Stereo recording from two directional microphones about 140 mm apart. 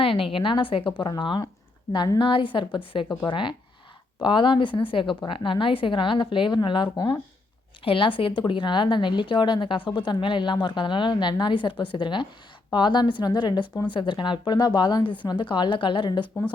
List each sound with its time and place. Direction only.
0.0 s a woman's voice: 40° left (ahead or behind)